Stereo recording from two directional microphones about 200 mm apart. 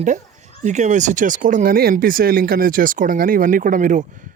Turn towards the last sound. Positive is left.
turn(degrees=-40)  # may be behind; listen again after turning